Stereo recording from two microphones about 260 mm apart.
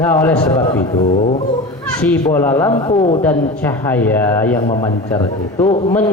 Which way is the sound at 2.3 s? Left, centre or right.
Centre.